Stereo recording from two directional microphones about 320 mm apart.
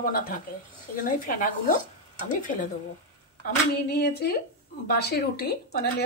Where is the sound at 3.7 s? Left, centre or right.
Left.